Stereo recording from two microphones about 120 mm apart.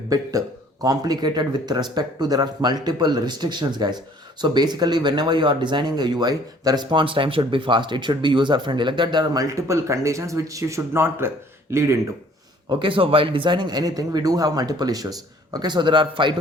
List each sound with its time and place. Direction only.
0.1 s speech: 30° right (ahead or behind)
12.6 s speech: 45° right (ahead or behind)